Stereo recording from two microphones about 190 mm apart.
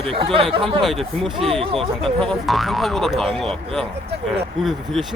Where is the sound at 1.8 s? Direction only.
5° left (ahead or behind).